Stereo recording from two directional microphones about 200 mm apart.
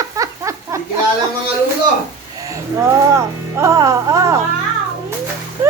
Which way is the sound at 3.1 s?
15° right (ahead or behind).